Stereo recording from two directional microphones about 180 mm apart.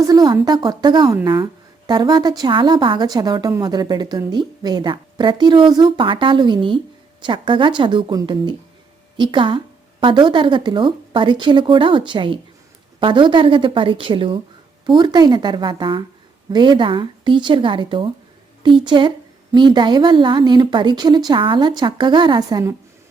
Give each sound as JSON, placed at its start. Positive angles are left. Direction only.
{"t": 0.1, "sound": "a woman's voice", "side_deg": -20}